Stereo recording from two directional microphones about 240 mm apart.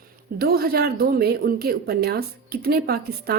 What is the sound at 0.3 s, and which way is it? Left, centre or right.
A woman's voice, right.